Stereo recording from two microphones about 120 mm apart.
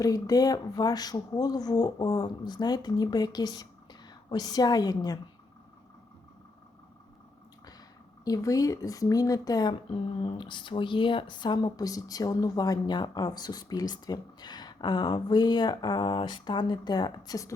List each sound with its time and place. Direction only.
0.0 s speech: 30° left (ahead or behind)
8.2 s speech: 30° left (ahead or behind)
10.2 s speech: 45° left (ahead or behind)